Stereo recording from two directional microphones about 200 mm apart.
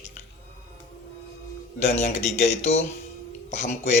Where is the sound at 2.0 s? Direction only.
35° left (ahead or behind).